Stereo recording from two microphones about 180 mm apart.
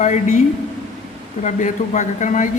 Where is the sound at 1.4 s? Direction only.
45° left (ahead or behind).